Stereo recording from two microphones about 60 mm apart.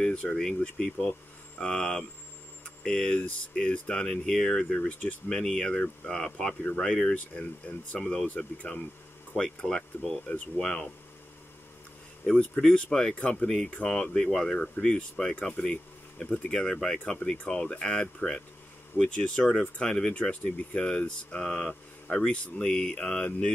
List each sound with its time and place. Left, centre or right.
0.1 s speech: left
0.8 s speech: centre
4.7 s speech: left
5.3 s speech: centre
12.4 s speech: centre